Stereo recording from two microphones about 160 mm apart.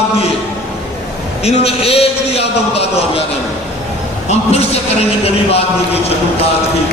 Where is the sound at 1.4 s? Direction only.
40° left (ahead or behind).